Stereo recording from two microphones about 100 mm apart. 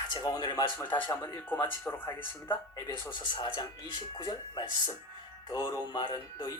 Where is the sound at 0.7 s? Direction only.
15° left (ahead or behind).